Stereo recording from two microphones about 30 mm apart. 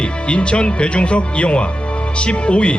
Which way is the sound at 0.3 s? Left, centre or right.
Left.